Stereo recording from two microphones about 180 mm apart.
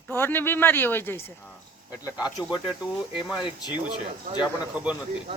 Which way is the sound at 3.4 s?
25° left (ahead or behind).